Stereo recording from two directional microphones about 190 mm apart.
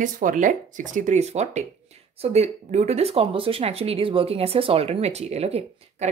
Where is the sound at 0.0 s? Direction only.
45° right (ahead or behind).